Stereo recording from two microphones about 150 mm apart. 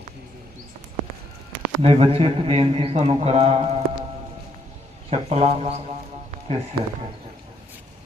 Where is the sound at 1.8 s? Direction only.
40° right (ahead or behind).